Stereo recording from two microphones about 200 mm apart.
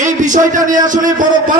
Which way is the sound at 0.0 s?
40° right (ahead or behind).